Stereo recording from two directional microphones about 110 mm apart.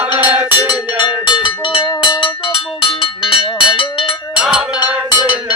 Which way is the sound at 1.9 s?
45° left (ahead or behind).